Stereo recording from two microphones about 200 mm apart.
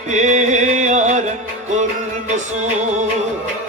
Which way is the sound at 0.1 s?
35° right (ahead or behind).